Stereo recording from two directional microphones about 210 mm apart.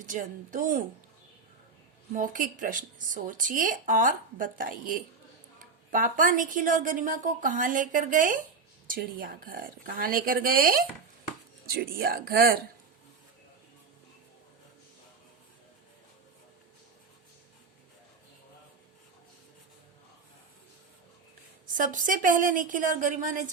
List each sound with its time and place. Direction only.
0.0 s speech: 40° right (ahead or behind)
2.1 s speech: 40° right (ahead or behind)
21.7 s speech: 40° right (ahead or behind)